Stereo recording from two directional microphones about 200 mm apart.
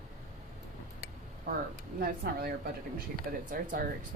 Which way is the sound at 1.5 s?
50° right (ahead or behind).